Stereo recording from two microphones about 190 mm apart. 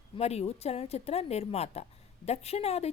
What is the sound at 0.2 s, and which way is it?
A woman's voice, 35° left (ahead or behind).